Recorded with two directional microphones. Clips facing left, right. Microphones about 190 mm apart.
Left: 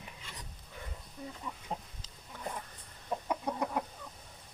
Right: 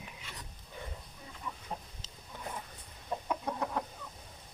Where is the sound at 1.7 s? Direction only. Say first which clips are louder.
Left 3 dB; 30° left (ahead or behind).